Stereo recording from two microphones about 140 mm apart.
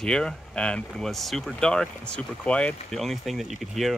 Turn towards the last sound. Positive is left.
turn(degrees=0)  # may be behind; listen again after turning